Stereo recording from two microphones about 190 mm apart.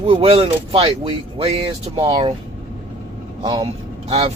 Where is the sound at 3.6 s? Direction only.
30° right (ahead or behind).